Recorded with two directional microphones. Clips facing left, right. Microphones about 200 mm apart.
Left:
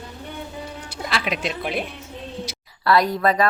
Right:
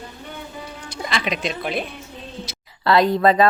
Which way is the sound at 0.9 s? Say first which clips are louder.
Right 1 dB; 5° left (ahead or behind).